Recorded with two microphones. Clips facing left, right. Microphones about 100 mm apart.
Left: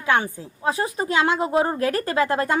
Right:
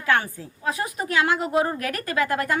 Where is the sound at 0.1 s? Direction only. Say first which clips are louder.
Left 2 dB; 20° left (ahead or behind).